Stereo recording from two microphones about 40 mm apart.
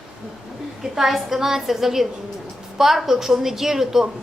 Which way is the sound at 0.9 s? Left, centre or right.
Centre.